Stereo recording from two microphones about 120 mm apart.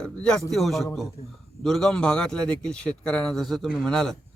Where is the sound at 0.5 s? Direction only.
Centre (ahead or behind).